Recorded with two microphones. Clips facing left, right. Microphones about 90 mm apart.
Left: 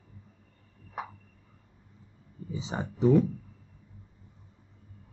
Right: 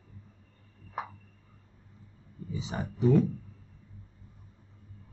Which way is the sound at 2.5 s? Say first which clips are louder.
Left 1 dB; 25° left (ahead or behind).